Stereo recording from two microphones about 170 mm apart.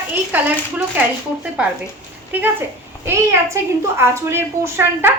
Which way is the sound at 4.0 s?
15° right (ahead or behind).